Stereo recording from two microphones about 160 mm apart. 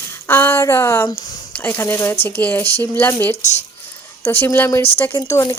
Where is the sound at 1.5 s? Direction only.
10° left (ahead or behind).